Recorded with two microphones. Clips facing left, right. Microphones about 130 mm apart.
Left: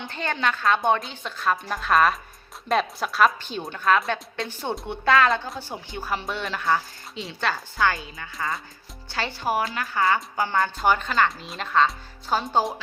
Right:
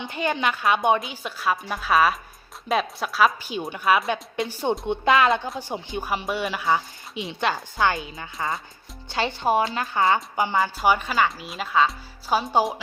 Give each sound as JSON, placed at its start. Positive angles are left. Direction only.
{"t": 0.0, "sound": "speech", "side_deg": -10}